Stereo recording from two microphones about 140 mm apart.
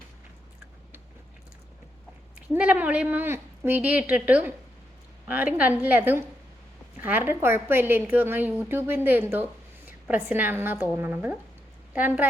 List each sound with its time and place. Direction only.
2.5 s a woman's voice: 10° right (ahead or behind)